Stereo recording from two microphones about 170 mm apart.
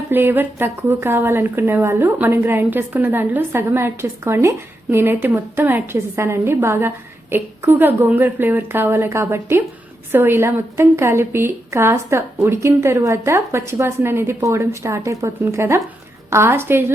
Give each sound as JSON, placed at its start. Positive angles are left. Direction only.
{"t": 0.1, "sound": "speech", "side_deg": -10}